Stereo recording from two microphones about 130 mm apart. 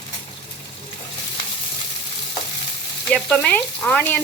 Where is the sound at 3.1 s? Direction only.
5° left (ahead or behind).